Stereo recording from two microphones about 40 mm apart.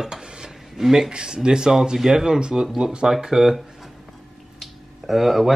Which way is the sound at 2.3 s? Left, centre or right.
Right.